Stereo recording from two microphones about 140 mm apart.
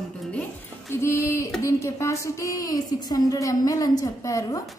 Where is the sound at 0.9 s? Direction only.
20° left (ahead or behind).